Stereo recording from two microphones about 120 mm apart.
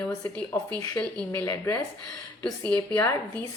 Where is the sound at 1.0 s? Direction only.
10° left (ahead or behind).